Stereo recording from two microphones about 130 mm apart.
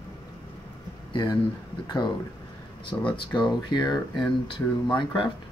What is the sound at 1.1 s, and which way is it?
Speech, 35° left (ahead or behind).